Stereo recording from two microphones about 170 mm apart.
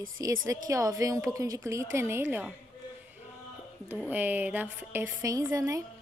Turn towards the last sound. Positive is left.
turn(degrees=-20)  # may be behind; listen again after turning